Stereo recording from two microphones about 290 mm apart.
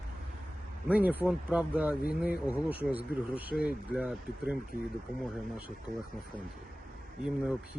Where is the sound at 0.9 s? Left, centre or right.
Centre.